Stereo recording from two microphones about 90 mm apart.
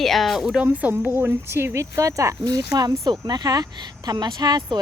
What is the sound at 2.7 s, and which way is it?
Speech, 45° right (ahead or behind).